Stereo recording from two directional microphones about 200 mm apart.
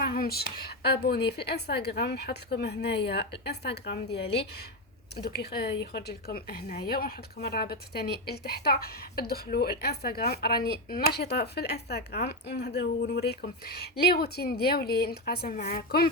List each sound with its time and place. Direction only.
0.0 s a woman's voice: 50° left (ahead or behind)